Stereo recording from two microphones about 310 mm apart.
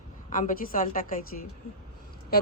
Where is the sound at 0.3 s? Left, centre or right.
Left.